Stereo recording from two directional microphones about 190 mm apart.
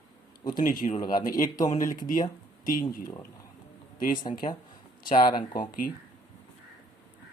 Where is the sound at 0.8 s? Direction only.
25° left (ahead or behind).